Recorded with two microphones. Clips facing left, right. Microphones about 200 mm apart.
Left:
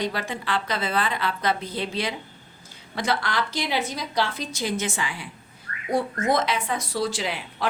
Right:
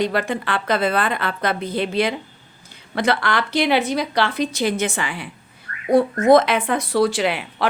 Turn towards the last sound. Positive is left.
turn(degrees=-65)  # may be behind; listen again after turning